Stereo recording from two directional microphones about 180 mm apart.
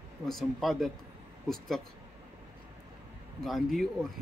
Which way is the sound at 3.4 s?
Centre (ahead or behind).